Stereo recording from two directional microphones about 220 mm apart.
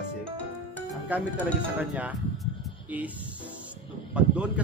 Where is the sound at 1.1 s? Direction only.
5° right (ahead or behind).